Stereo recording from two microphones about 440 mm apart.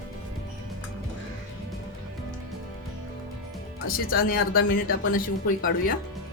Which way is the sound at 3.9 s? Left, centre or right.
Centre.